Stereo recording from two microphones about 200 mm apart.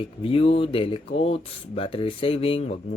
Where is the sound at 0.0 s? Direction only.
30° left (ahead or behind).